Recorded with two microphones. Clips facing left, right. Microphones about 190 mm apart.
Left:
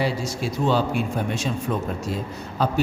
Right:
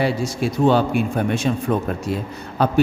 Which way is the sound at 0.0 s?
55° right (ahead or behind).